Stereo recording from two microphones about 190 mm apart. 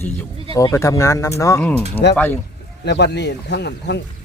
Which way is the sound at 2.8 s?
60° left (ahead or behind).